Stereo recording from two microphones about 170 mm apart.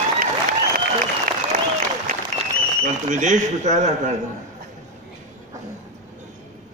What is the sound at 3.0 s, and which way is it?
Speech, 45° right (ahead or behind).